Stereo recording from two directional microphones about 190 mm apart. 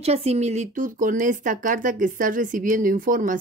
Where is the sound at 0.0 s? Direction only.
35° right (ahead or behind).